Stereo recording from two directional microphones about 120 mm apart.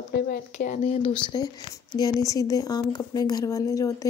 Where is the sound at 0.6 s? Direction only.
90° left.